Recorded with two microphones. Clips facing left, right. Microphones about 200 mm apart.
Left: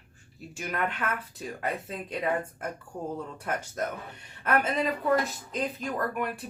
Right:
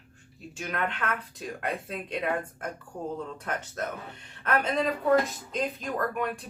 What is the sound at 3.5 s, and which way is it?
Speech, 10° left (ahead or behind).